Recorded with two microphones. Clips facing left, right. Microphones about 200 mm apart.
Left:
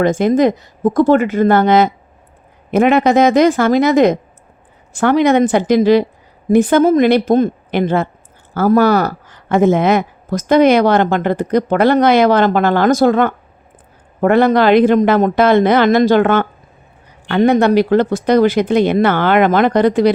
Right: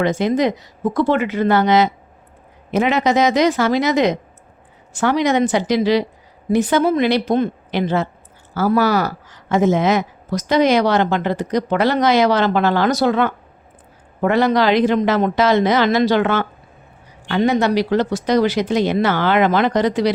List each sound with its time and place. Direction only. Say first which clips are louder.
0.0 s speech: left 5 dB; 50° left (ahead or behind)